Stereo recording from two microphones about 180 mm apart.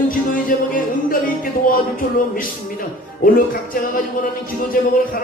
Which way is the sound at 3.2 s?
50° left (ahead or behind).